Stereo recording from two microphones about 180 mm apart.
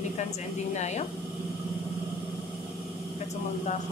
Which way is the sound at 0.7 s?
40° left (ahead or behind).